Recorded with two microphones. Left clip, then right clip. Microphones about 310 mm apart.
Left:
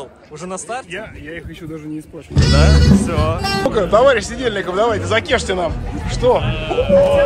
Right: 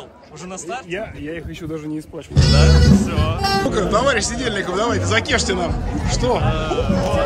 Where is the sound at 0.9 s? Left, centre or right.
Right.